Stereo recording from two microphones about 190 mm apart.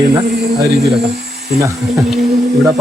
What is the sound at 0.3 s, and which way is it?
Speech, 60° right (ahead or behind).